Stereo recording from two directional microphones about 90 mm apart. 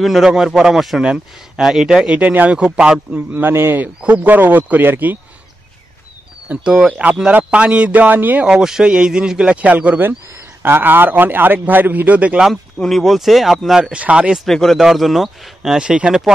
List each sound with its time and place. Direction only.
0.0 s speech: 5° right (ahead or behind)
3.2 s a man's voice: 25° right (ahead or behind)
6.5 s a man's voice: 10° right (ahead or behind)
12.7 s speech: 5° left (ahead or behind)
14.4 s speech: 5° left (ahead or behind)